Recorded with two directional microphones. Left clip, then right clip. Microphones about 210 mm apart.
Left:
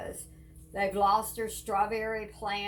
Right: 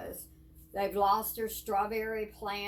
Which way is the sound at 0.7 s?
15° right (ahead or behind).